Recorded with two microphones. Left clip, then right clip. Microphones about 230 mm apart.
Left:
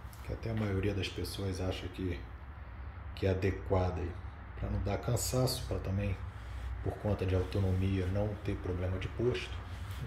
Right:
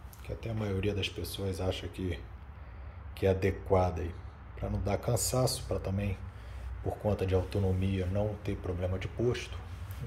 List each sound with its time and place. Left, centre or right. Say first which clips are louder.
0.4 s speech: right 1 dB; centre
3.2 s speech: right 4 dB; centre